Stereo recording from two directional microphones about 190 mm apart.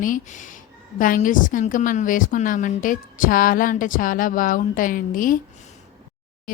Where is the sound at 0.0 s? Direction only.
45° left (ahead or behind).